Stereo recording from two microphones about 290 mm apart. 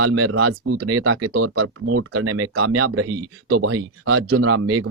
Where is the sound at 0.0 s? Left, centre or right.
Right.